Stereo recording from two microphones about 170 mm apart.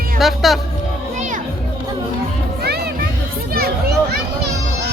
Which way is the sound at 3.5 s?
65° right (ahead or behind).